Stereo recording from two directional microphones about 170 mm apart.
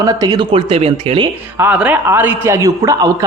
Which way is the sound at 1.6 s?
10° right (ahead or behind).